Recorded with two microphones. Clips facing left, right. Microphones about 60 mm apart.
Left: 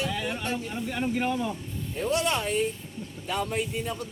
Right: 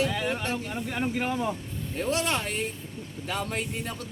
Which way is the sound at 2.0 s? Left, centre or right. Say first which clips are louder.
Left 1 dB; right.